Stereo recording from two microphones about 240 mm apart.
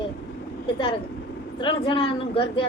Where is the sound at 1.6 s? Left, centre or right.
Left.